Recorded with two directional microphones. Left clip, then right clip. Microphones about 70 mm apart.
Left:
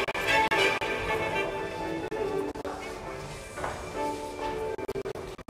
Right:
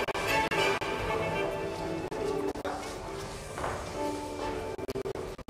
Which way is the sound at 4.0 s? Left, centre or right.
Left.